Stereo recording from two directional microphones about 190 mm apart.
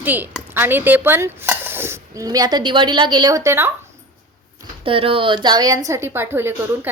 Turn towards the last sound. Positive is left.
turn(degrees=-10)  # may be behind; listen again after turning